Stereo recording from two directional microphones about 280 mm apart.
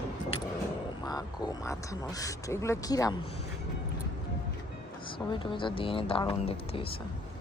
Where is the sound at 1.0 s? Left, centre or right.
Centre.